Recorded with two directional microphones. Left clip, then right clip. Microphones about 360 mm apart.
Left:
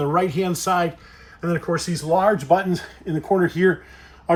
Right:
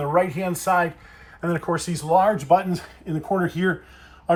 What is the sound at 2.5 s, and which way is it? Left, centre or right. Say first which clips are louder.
Speech: even; centre.